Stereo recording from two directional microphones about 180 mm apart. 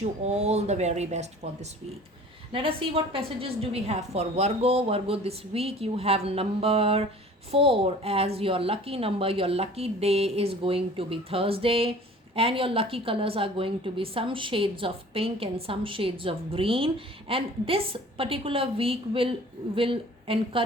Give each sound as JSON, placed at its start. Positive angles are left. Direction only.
{"t": 0.0, "sound": "a woman's voice", "side_deg": -40}
{"t": 2.5, "sound": "a woman's voice", "side_deg": -30}